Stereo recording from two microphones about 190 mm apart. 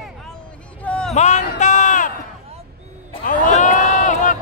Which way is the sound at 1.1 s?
35° left (ahead or behind).